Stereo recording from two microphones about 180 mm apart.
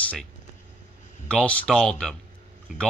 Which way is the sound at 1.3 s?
5° left (ahead or behind).